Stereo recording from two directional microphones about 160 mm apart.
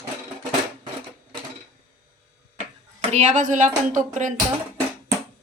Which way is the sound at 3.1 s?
50° right (ahead or behind).